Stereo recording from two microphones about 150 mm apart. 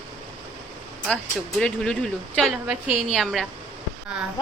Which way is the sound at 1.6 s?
5° left (ahead or behind).